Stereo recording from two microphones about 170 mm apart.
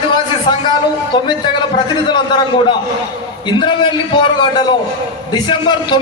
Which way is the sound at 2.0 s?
25° left (ahead or behind).